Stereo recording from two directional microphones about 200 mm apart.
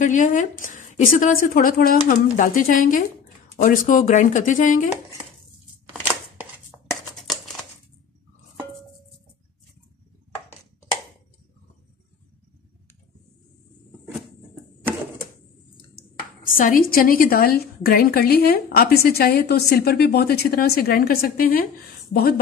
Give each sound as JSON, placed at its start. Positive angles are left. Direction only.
{"t": 0.0, "sound": "speech", "side_deg": 40}
{"t": 16.0, "sound": "speech", "side_deg": 45}